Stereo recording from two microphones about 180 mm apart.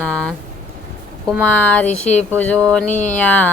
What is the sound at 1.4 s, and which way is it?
Speech, 5° left (ahead or behind).